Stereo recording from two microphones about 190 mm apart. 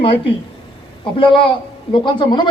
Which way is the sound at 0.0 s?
25° left (ahead or behind).